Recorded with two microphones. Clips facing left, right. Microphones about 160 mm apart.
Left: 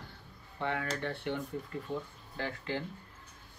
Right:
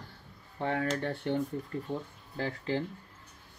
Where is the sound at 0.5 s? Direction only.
40° right (ahead or behind).